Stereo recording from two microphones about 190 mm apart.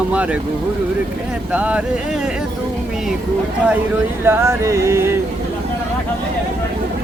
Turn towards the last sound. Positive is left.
turn(degrees=-15)  # may be behind; listen again after turning